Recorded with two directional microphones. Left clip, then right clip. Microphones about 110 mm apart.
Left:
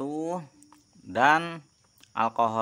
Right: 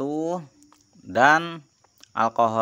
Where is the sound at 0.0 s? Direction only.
30° right (ahead or behind).